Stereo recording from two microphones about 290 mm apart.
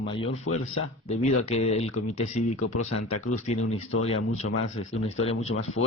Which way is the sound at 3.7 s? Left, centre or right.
Left.